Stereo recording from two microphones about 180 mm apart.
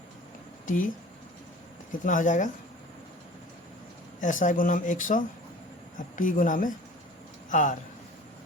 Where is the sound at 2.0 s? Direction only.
45° left (ahead or behind).